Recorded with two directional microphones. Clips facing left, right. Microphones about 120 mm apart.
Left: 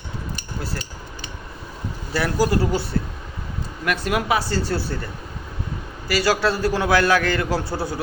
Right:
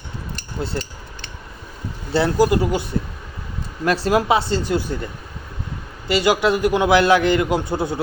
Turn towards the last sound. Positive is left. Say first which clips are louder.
# right 3 dB
turn(degrees=-20)  # may be behind; listen again after turning